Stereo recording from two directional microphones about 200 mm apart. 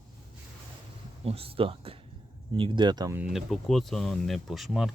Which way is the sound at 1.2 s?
30° right (ahead or behind).